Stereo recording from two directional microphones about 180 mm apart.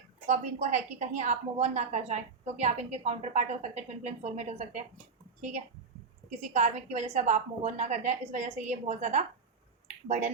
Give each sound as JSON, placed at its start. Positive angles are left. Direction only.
{"t": 0.3, "sound": "a woman's voice", "side_deg": -40}
{"t": 9.8, "sound": "finger snapping", "side_deg": -40}